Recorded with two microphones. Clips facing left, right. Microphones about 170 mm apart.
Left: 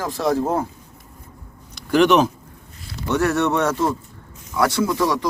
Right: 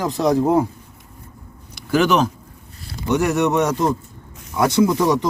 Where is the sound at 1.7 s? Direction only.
Centre (ahead or behind).